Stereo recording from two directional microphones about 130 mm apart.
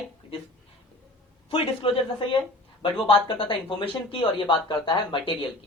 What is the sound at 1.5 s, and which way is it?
Speech, 45° left (ahead or behind).